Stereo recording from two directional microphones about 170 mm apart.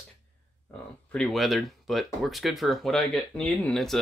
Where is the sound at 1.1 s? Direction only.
Centre (ahead or behind).